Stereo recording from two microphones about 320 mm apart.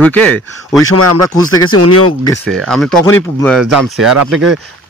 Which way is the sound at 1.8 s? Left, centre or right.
Left.